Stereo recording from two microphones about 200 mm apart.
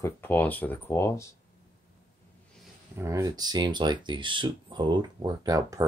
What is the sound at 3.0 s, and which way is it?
Speech, 15° right (ahead or behind).